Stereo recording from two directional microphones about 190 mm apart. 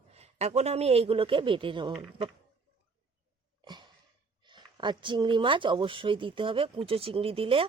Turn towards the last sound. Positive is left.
turn(degrees=-30)  # may be behind; listen again after turning